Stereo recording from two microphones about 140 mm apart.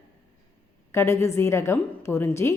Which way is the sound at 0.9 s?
20° left (ahead or behind).